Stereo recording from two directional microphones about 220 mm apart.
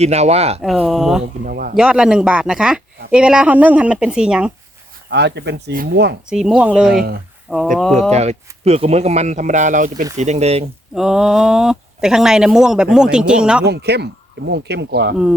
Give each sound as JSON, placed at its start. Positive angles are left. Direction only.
{"t": 0.0, "sound": "speech", "side_deg": -30}
{"t": 0.6, "sound": "speech", "side_deg": 0}
{"t": 1.5, "sound": "speech", "side_deg": -40}
{"t": 1.7, "sound": "speech", "side_deg": -5}
{"t": 5.0, "sound": "speech", "side_deg": -50}
{"t": 6.3, "sound": "speech", "side_deg": -5}
{"t": 6.9, "sound": "speech", "side_deg": -45}
{"t": 7.5, "sound": "speech", "side_deg": 0}
{"t": 8.1, "sound": "speech", "side_deg": -30}
{"t": 10.9, "sound": "speech", "side_deg": 0}
{"t": 13.7, "sound": "speech", "side_deg": -50}